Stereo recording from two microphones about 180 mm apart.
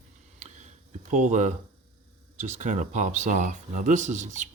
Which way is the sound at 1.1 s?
40° right (ahead or behind).